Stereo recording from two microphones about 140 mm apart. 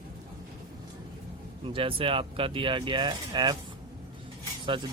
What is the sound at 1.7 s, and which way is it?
Speech, 40° right (ahead or behind).